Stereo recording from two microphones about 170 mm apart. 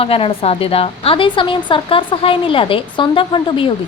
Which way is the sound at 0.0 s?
35° left (ahead or behind).